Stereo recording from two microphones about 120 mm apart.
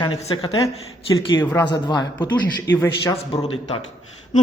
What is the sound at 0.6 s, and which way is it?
Speech, 45° left (ahead or behind).